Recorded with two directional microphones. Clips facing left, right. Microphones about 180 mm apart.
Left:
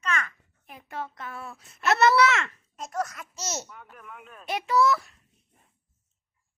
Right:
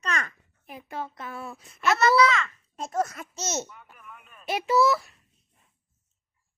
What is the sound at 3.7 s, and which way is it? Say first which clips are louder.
Speech: left 3 dB; 75° left (ahead or behind).